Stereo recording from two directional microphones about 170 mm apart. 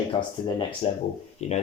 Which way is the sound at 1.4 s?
40° left (ahead or behind).